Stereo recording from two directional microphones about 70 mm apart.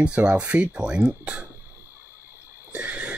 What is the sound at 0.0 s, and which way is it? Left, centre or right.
Speech, centre.